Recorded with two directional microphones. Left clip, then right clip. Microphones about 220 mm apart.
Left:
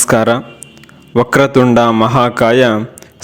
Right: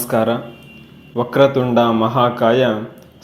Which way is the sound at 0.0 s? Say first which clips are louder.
Left 6 dB; 45° left (ahead or behind).